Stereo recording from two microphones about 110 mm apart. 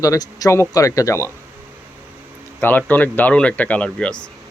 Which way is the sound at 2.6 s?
15° left (ahead or behind).